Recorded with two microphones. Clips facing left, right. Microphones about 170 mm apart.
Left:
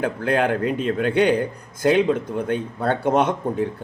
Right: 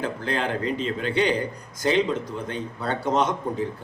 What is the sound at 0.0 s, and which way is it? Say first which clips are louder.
A man's voice: left 6 dB; 60° left (ahead or behind).